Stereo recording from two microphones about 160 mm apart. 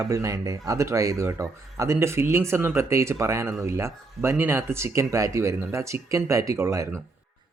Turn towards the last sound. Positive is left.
turn(degrees=-20)  # may be behind; listen again after turning